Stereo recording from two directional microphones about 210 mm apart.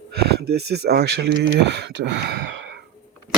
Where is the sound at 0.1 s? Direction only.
50° right (ahead or behind).